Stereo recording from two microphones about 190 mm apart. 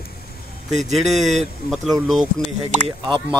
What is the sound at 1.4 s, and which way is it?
Speech, centre (ahead or behind).